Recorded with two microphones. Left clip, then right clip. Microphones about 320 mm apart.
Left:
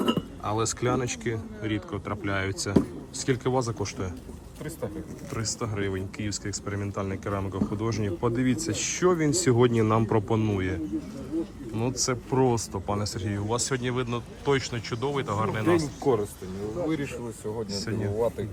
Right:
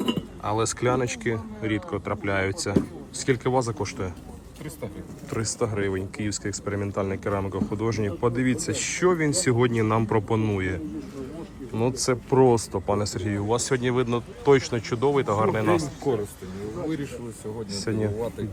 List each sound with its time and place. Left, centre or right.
0.4 s speech: centre
5.3 s speech: centre
17.7 s speech: centre